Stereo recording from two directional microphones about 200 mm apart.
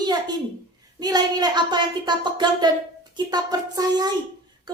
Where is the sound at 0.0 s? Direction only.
20° right (ahead or behind).